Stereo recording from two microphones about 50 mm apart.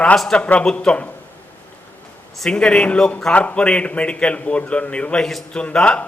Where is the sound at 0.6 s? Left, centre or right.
Centre.